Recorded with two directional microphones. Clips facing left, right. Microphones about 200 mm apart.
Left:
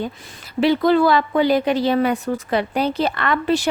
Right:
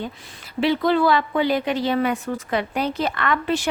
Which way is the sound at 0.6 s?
40° left (ahead or behind).